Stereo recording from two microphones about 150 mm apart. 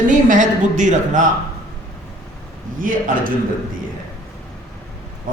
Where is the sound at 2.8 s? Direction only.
65° right (ahead or behind).